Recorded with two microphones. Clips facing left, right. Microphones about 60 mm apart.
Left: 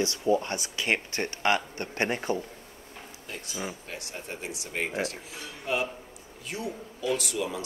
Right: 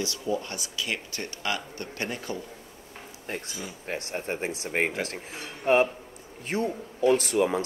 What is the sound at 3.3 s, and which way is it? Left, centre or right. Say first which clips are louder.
Speech: even; right.